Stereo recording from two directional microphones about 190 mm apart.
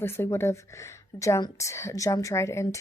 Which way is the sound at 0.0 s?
10° left (ahead or behind).